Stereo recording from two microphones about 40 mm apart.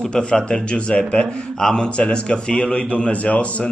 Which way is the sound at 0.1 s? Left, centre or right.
Left.